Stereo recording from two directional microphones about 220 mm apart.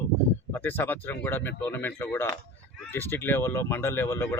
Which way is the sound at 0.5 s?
10° left (ahead or behind).